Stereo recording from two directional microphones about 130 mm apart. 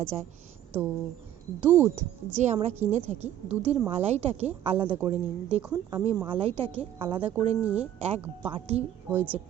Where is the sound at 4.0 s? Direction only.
55° right (ahead or behind).